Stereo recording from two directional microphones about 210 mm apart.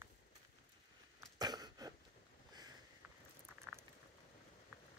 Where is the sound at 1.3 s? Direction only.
20° right (ahead or behind).